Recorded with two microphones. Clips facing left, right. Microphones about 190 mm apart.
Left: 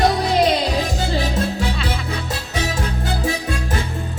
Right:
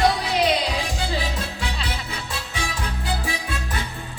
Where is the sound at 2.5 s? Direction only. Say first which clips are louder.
Left 7 dB; 45° left (ahead or behind).